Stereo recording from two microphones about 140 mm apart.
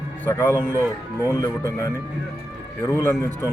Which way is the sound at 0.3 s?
15° left (ahead or behind).